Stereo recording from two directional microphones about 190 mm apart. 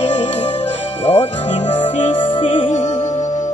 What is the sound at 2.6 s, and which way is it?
Music, 35° left (ahead or behind).